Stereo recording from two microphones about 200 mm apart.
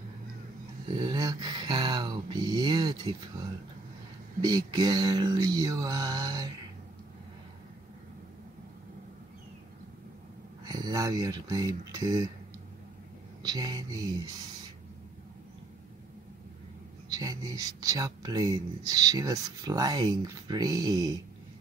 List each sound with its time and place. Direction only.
0.8 s speech: 20° right (ahead or behind)
4.4 s speech: 20° right (ahead or behind)
10.6 s speech: 20° right (ahead or behind)
13.4 s speech: 20° right (ahead or behind)
17.1 s speech: 20° right (ahead or behind)